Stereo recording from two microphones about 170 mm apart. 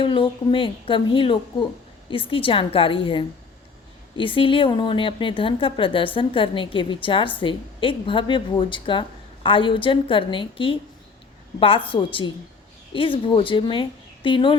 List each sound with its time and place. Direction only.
0.0 s a woman's voice: 30° left (ahead or behind)
11.9 s a woman's voice: 30° left (ahead or behind)